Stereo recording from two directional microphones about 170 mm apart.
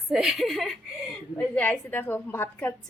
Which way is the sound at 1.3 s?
10° left (ahead or behind).